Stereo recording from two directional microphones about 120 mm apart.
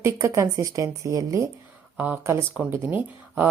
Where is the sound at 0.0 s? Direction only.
25° right (ahead or behind).